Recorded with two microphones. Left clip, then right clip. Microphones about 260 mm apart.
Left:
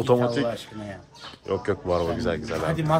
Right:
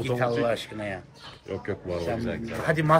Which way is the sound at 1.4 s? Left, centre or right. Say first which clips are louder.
Left 7 dB; centre.